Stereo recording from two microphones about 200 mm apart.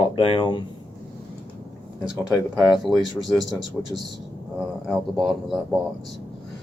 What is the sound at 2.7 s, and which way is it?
Speech, centre (ahead or behind).